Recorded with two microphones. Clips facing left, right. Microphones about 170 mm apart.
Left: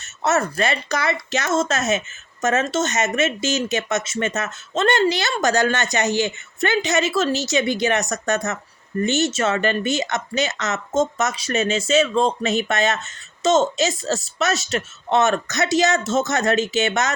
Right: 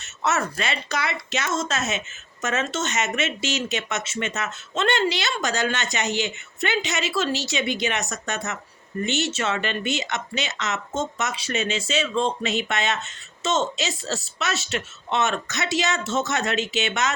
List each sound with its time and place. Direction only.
0.2 s speech: 40° left (ahead or behind)